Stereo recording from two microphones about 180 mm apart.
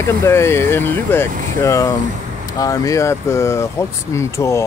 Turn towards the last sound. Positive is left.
turn(degrees=15)  # may be behind; listen again after turning